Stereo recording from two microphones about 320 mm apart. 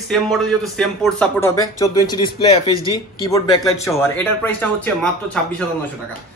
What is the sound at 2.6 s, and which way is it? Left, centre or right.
Speech, centre.